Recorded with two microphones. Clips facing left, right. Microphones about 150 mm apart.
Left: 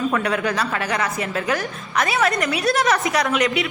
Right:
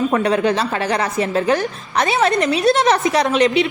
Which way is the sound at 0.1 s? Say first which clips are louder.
Right 5 dB; 30° right (ahead or behind).